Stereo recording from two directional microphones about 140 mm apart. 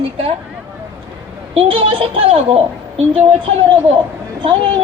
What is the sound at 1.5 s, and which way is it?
Speech, 40° right (ahead or behind).